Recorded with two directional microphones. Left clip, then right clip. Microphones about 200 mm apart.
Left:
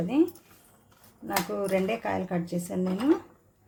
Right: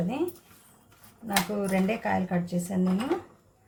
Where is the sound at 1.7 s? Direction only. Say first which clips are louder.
Even; 40° left (ahead or behind).